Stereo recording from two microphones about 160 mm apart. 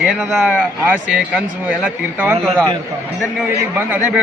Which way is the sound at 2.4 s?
5° left (ahead or behind).